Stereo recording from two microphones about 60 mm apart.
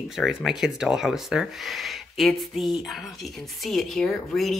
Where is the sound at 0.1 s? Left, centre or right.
Centre.